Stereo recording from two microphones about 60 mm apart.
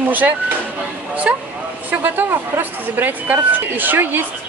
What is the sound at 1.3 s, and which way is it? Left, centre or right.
A man's voice, right.